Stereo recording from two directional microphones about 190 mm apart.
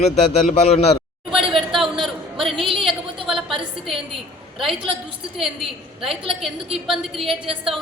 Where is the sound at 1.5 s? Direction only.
Centre (ahead or behind).